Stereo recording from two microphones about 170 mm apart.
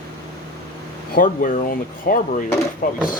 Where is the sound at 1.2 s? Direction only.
55° left (ahead or behind).